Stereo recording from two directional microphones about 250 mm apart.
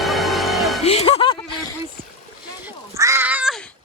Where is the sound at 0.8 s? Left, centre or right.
Left.